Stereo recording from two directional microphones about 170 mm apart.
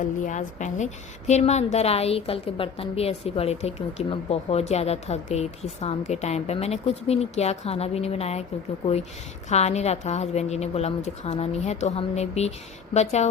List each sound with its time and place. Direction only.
0.3 s a woman's voice: 45° left (ahead or behind)
9.5 s a woman's voice: 40° left (ahead or behind)